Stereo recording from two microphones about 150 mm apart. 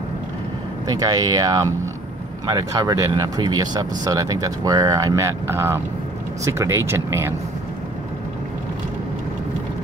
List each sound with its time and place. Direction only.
0.8 s speech: 25° right (ahead or behind)